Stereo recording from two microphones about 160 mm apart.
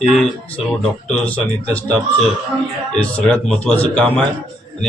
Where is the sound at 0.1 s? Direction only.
Centre (ahead or behind).